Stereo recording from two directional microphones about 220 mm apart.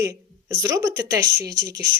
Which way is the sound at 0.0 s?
15° right (ahead or behind).